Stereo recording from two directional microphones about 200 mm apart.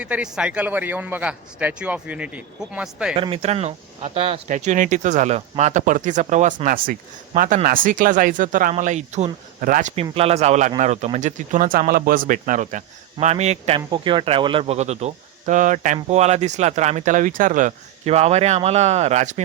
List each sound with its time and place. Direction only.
0.0 s a man's voice: 5° right (ahead or behind)
3.2 s speech: 25° right (ahead or behind)